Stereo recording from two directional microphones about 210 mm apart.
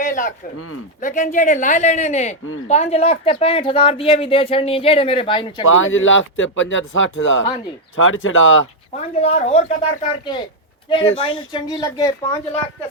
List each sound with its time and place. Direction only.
0.0 s a sound: 40° left (ahead or behind)
1.0 s speech: 35° left (ahead or behind)
5.6 s speech: 70° left (ahead or behind)
8.9 s speech: 35° left (ahead or behind); by 12.1 s 20° left (ahead or behind)